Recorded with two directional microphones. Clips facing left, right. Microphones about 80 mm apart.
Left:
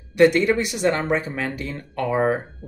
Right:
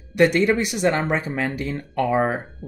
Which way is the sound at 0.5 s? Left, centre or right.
Right.